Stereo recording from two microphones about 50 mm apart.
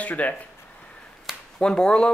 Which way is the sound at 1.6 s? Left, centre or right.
Centre.